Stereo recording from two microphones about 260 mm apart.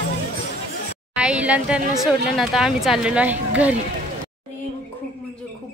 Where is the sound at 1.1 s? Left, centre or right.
Centre.